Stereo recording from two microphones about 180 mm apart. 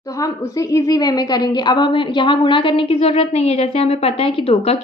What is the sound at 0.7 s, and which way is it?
A woman's voice, 20° left (ahead or behind).